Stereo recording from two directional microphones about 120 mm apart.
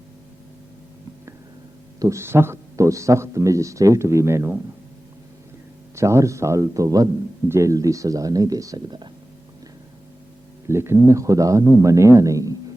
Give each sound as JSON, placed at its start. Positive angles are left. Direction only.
{"t": 2.0, "sound": "speech", "side_deg": -25}
{"t": 6.0, "sound": "speech", "side_deg": -25}
{"t": 10.7, "sound": "speech", "side_deg": -20}